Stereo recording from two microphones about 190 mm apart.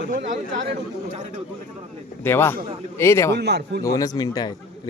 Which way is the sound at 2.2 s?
10° left (ahead or behind).